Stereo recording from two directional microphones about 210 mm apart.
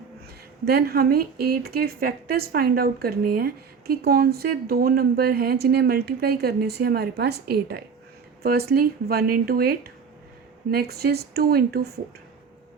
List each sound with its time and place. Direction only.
0.6 s speech: 45° right (ahead or behind)